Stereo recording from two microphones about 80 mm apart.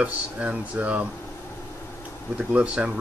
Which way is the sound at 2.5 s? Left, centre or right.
Centre.